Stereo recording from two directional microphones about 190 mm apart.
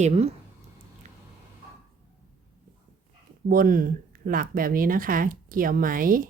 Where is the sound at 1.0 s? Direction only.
35° right (ahead or behind).